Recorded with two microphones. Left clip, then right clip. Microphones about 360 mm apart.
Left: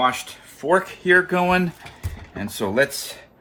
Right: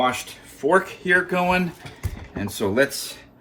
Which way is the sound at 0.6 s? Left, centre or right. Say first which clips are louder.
Even; left.